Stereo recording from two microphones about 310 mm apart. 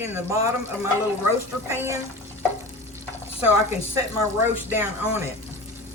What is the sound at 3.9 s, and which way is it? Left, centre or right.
Speech, centre.